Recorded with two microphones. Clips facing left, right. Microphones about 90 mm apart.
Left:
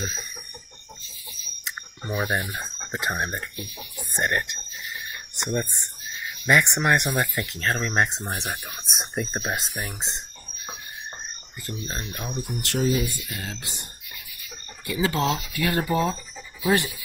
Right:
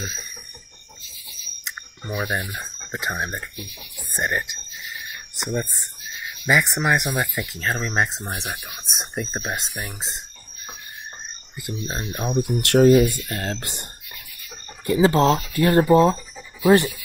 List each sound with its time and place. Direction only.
1.6 s cricket: centre (ahead or behind)
2.9 s speech: centre (ahead or behind)
12.3 s speech: 60° right (ahead or behind)
14.9 s speech: 35° right (ahead or behind)